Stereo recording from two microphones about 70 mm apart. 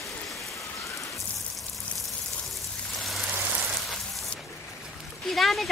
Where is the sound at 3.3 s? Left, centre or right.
Right.